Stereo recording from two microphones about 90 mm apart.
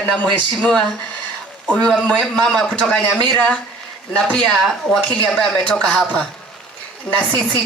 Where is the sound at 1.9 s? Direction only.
15° left (ahead or behind).